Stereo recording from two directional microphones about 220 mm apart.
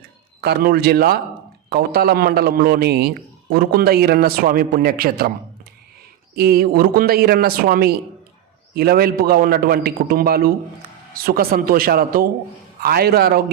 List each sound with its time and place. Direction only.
0.4 s a man's voice: 45° right (ahead or behind)
6.3 s a man's voice: 45° right (ahead or behind)